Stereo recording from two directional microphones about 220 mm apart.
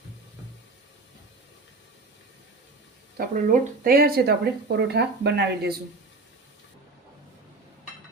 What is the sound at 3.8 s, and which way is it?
Speech, 40° right (ahead or behind).